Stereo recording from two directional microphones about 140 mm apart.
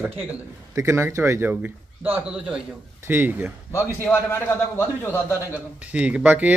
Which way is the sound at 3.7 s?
15° left (ahead or behind).